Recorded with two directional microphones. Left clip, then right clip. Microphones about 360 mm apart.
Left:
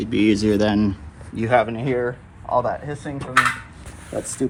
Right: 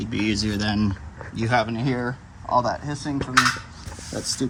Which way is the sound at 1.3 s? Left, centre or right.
Centre.